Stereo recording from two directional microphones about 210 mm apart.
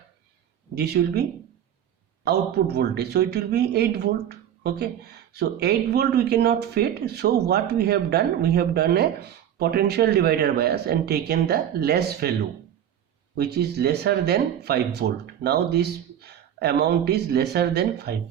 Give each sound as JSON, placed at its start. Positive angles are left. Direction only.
{"t": 1.0, "sound": "speech", "side_deg": -55}
{"t": 2.2, "sound": "speech", "side_deg": -50}
{"t": 13.3, "sound": "speech", "side_deg": -50}